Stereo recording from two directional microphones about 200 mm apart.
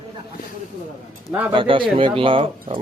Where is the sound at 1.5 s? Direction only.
25° right (ahead or behind).